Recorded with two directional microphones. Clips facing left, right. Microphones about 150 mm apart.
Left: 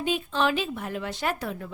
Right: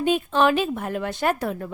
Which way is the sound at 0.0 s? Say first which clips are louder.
Right 6 dB; 55° right (ahead or behind).